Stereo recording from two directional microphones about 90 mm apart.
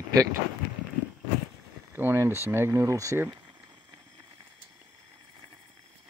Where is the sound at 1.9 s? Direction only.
30° right (ahead or behind).